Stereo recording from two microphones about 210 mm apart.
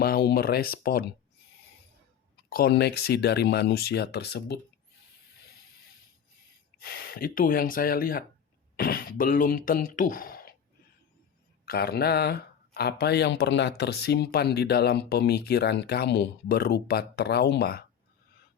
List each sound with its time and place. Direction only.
0.0 s speech: 45° left (ahead or behind)
2.3 s speech: 45° left (ahead or behind)
6.7 s speech: 45° left (ahead or behind)
11.6 s speech: 45° left (ahead or behind)